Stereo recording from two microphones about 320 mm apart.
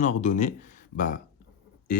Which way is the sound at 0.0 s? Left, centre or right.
Left.